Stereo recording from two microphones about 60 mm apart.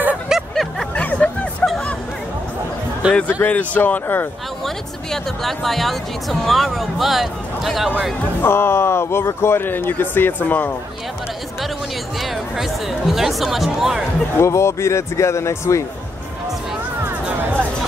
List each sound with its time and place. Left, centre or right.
0.3 s a sound: centre
0.9 s music: left
1.2 s hubbub: left
3.0 s speech: right
3.4 s speech: left
4.6 s speech: centre
8.4 s speech: left
12.2 s speech: centre
14.3 s speech: left
17.0 s music: right